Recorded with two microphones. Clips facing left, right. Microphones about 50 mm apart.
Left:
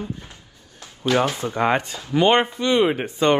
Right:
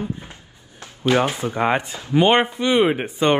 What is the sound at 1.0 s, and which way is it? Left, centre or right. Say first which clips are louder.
Speech: right 1 dB; right.